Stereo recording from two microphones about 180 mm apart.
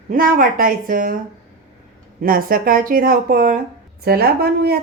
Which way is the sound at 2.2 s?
55° right (ahead or behind).